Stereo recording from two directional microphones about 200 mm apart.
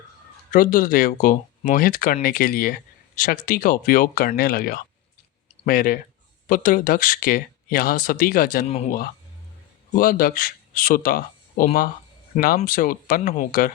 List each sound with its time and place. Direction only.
0.5 s speech: 45° left (ahead or behind)
9.9 s speech: 45° left (ahead or behind)